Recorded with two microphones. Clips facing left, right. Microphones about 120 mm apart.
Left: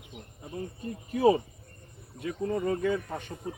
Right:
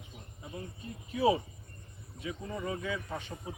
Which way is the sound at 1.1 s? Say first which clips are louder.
Left 5 dB; 50° left (ahead or behind).